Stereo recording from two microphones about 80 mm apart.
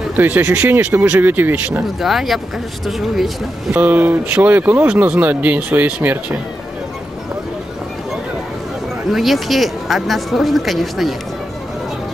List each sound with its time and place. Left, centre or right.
0.1 s speech: right
2.0 s speech: centre
3.7 s speech: right
9.1 s speech: centre